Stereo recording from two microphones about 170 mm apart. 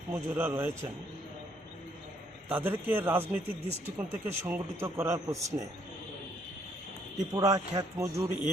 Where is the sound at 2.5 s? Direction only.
10° right (ahead or behind).